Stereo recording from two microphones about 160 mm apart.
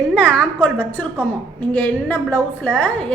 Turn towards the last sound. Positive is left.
turn(degrees=10)  # may be behind; listen again after turning